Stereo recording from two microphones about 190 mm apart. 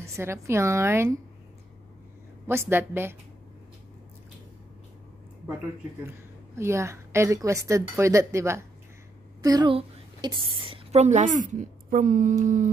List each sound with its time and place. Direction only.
0.0 s a woman's voice: 15° right (ahead or behind)
2.4 s a woman's voice: 10° right (ahead or behind)
6.0 s a woman's voice: 15° right (ahead or behind); by 12.6 s 40° right (ahead or behind)